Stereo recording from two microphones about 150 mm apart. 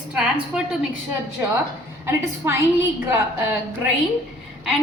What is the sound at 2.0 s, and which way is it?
Speech, 15° right (ahead or behind).